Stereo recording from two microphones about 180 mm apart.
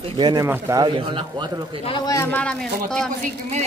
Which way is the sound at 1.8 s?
25° left (ahead or behind).